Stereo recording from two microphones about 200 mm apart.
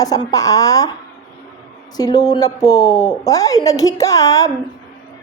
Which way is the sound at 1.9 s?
20° left (ahead or behind).